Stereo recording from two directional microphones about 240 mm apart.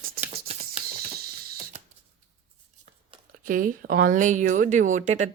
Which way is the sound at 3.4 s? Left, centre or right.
Right.